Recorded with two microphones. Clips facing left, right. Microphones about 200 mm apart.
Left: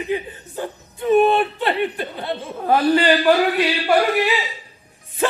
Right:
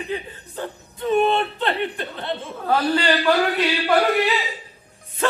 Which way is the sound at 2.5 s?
15° left (ahead or behind).